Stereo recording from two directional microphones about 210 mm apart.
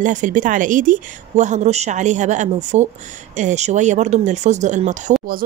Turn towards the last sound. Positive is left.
turn(degrees=-35)  # may be behind; listen again after turning